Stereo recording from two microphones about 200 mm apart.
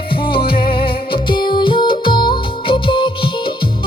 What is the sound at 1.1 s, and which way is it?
Music, 25° left (ahead or behind).